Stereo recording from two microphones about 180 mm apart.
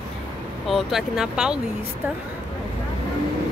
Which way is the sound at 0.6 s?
Centre (ahead or behind).